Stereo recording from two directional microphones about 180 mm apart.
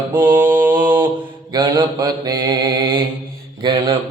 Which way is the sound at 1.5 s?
25° right (ahead or behind).